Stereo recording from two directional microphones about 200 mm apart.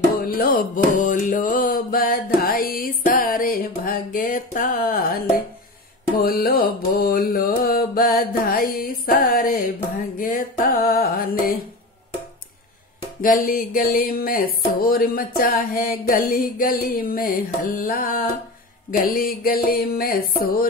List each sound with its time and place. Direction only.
0.2 s mantra: 45° left (ahead or behind)
13.2 s mantra: 45° left (ahead or behind)